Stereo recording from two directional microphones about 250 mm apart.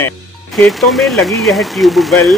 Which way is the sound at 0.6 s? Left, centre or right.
Centre.